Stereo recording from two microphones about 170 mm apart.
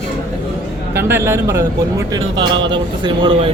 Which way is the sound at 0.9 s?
15° right (ahead or behind).